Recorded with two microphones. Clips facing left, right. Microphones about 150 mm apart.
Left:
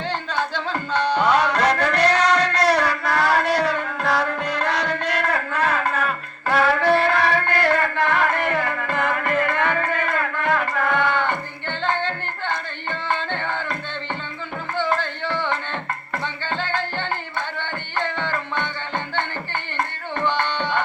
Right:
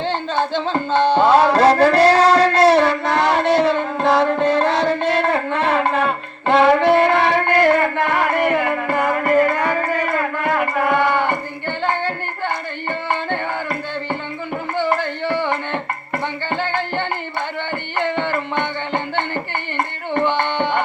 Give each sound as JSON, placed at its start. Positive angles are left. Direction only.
{"t": 0.0, "sound": "music", "side_deg": -30}
{"t": 11.0, "sound": "a sound", "side_deg": -15}
{"t": 12.0, "sound": "tabla", "side_deg": -15}
{"t": 14.8, "sound": "music", "side_deg": -15}
{"t": 19.7, "sound": "tabla", "side_deg": -20}